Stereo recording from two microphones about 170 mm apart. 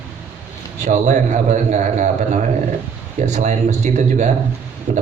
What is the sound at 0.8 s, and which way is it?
A man's voice, 45° right (ahead or behind).